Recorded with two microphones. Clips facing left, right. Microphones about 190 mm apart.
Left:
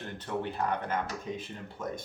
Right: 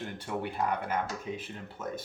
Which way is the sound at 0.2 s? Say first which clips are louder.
Left 1 dB; 10° right (ahead or behind).